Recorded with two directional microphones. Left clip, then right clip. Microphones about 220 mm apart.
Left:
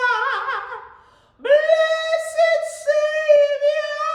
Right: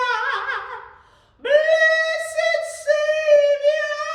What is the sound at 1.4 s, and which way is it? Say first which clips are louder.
Child singing: left 1 dB; 20° left (ahead or behind).